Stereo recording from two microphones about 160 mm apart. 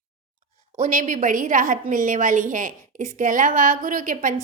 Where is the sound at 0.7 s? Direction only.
55° right (ahead or behind).